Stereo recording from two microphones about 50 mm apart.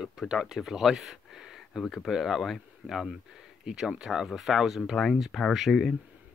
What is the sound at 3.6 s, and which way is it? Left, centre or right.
Speech, centre.